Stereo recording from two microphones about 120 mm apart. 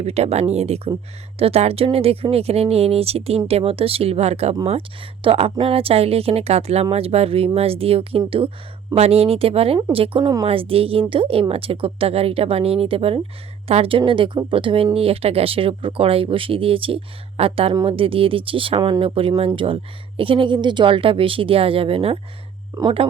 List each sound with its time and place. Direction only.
0.0 s speech: 60° right (ahead or behind)
9.0 s speech: 60° right (ahead or behind)
22.7 s speech: 25° right (ahead or behind)